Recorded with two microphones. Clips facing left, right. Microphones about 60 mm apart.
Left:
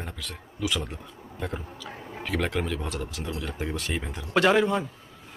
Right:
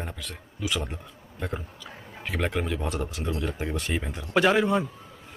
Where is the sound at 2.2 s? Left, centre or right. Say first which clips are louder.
Even; centre.